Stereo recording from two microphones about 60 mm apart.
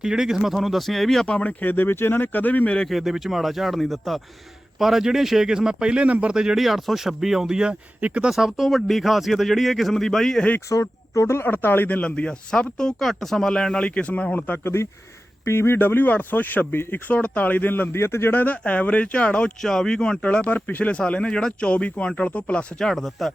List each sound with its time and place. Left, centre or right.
0.0 s a man's voice: centre
1.3 s speech: left
2.9 s a man's voice: centre; by 6.3 s right
6.3 s speech: centre
8.3 s a man's voice: centre
10.7 s speech: left
11.4 s speech: left
12.0 s speech: centre
13.5 s speech: centre
14.6 s speech: left
17.9 s speech: left
18.3 s speech: left
22.8 s a man's voice: centre